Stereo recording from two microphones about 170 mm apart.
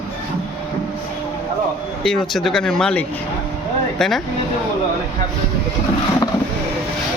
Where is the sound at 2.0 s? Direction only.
Centre (ahead or behind).